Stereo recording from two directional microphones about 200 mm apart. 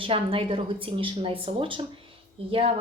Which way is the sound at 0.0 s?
25° right (ahead or behind).